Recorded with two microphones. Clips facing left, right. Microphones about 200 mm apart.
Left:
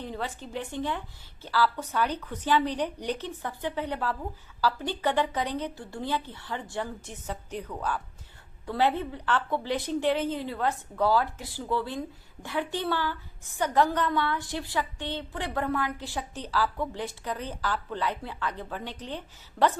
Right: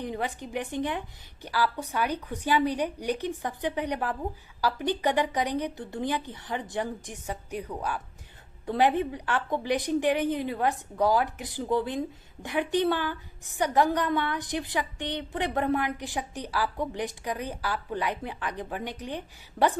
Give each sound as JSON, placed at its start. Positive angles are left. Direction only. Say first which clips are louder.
{"t": 0.0, "sound": "a woman's voice", "louder": "right 3 dB", "side_deg": -15}